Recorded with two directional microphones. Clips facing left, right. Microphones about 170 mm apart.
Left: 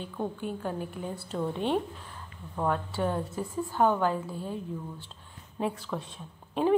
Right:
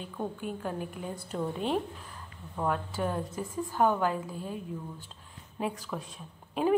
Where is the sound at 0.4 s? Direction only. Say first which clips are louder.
Left 2 dB; 35° left (ahead or behind).